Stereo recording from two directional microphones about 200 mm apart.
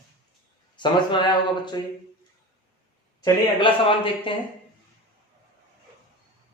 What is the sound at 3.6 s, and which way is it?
Speech, 25° left (ahead or behind).